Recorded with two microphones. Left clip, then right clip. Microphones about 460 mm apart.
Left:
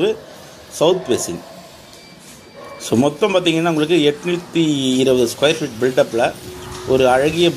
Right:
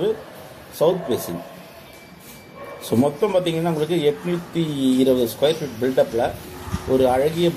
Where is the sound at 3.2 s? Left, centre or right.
Right.